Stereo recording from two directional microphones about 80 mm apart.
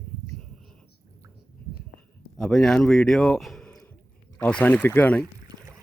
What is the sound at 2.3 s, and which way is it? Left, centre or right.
A man's voice, centre.